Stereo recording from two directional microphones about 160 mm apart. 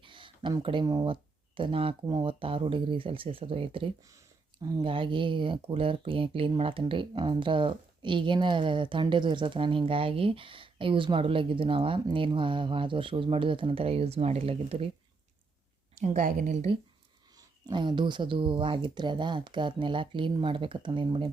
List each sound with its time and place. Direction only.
0.0 s speech: 30° right (ahead or behind)
16.1 s a woman's voice: 60° right (ahead or behind)
17.3 s speech: 30° right (ahead or behind)